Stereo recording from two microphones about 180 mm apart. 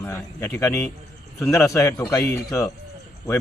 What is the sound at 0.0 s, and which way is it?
Speech, 10° left (ahead or behind).